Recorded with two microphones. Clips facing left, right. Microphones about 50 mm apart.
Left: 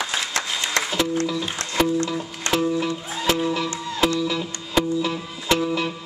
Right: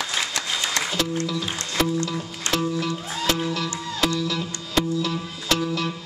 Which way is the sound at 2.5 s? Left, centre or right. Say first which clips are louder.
Left 3 dB; centre.